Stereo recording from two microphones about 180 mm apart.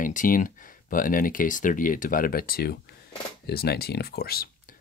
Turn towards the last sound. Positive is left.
turn(degrees=55)  # may be behind; listen again after turning